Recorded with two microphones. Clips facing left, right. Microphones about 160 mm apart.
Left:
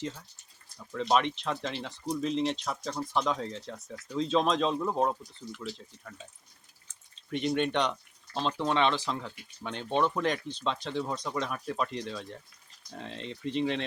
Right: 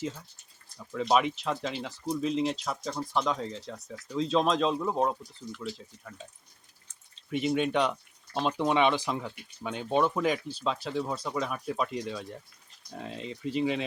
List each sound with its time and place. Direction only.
0.9 s speech: 5° right (ahead or behind)
7.3 s speech: 5° right (ahead or behind)